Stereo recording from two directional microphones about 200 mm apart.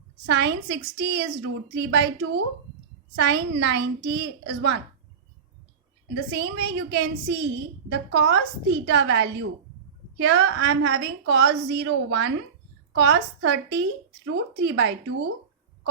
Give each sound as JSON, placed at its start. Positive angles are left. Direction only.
{"t": 0.3, "sound": "a woman's voice", "side_deg": -60}
{"t": 6.3, "sound": "a woman's voice", "side_deg": -60}